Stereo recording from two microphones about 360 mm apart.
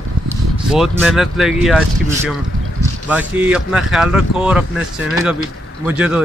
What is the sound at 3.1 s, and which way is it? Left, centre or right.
Speech, centre.